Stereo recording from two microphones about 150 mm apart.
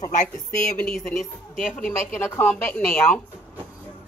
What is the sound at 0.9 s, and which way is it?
A woman's voice, centre (ahead or behind).